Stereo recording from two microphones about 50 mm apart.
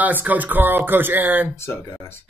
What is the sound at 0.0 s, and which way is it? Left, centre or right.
Speech, right.